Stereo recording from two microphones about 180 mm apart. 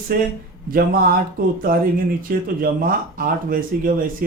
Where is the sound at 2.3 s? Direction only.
55° right (ahead or behind).